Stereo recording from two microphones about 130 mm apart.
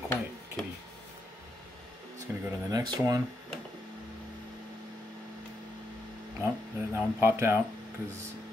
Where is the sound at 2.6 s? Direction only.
30° right (ahead or behind).